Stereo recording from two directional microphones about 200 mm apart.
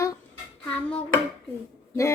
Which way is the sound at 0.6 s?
5° left (ahead or behind).